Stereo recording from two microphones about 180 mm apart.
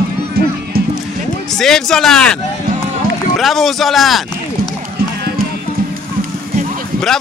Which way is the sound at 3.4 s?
Centre (ahead or behind).